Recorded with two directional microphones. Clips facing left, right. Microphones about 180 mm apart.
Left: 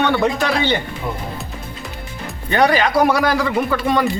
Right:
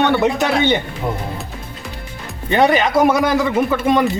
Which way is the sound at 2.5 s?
20° right (ahead or behind).